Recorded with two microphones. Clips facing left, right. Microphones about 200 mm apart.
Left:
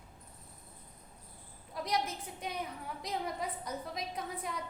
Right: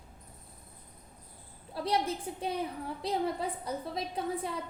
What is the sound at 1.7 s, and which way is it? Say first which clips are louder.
A woman's voice: right 4 dB; 30° right (ahead or behind).